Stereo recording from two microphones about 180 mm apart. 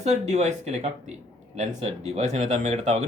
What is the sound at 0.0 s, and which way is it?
Speech, 40° right (ahead or behind).